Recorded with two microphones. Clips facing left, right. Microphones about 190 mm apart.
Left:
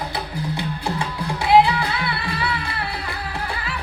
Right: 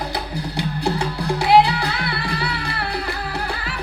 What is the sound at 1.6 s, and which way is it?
Music, 40° right (ahead or behind).